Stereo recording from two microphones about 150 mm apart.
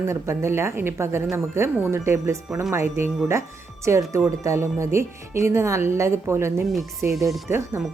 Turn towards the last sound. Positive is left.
turn(degrees=-15)  # may be behind; listen again after turning